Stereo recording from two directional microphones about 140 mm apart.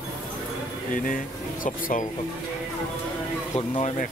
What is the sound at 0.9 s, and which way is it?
Speech, 75° left (ahead or behind).